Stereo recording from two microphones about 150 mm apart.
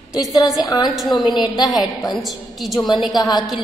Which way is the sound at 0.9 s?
Centre (ahead or behind).